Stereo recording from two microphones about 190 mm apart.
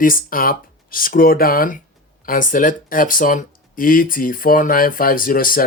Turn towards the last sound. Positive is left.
turn(degrees=45)  # may be behind; listen again after turning